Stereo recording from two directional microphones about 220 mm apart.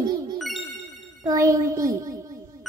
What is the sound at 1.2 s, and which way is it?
A child's voice, 15° right (ahead or behind).